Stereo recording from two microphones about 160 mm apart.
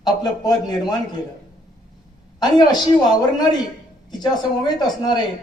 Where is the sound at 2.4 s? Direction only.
25° left (ahead or behind).